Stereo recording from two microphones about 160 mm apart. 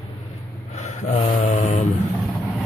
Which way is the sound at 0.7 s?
45° left (ahead or behind).